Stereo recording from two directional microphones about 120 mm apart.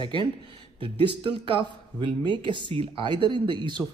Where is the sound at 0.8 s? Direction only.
45° right (ahead or behind).